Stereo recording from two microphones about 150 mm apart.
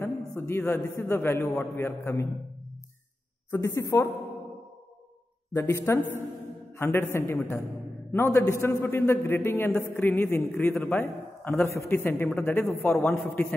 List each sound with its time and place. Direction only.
0.0 s a man's voice: 20° left (ahead or behind)
3.4 s a man's voice: 20° left (ahead or behind)
5.5 s a man's voice: 20° left (ahead or behind)